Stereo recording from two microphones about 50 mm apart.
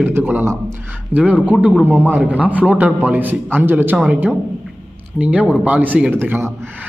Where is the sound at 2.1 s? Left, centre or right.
Right.